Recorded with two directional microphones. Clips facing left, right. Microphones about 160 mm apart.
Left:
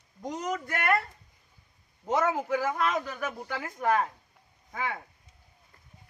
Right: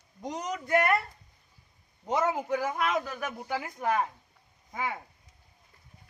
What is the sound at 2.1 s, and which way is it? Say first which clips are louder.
Speech: left 1 dB; 20° right (ahead or behind).